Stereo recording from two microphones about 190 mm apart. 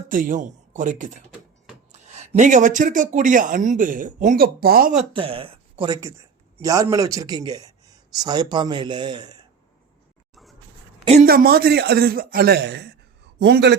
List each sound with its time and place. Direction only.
0.1 s speech: 45° right (ahead or behind)
5.1 s speech: 30° right (ahead or behind)
6.6 s a man's voice: 15° right (ahead or behind)
11.3 s speech: 55° right (ahead or behind)